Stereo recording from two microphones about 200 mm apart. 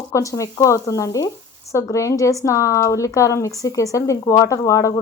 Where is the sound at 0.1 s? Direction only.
15° left (ahead or behind).